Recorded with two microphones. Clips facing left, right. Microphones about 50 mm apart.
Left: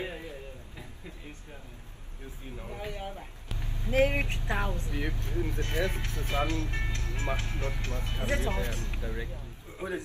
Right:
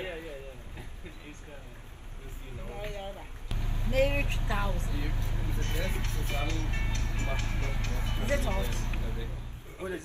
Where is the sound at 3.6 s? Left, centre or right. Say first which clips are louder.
Right 2 dB; right.